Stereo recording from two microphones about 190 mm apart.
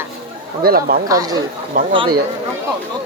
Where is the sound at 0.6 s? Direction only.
50° right (ahead or behind).